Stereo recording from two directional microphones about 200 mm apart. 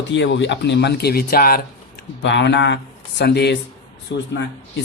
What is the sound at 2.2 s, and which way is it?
Speech, 65° left (ahead or behind).